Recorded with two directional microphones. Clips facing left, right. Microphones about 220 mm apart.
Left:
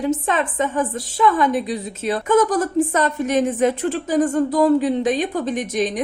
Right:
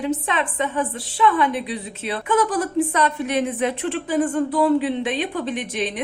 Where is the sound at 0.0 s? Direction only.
45° left (ahead or behind).